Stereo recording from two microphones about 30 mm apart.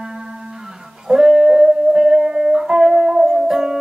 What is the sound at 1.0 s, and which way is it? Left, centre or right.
Music, centre.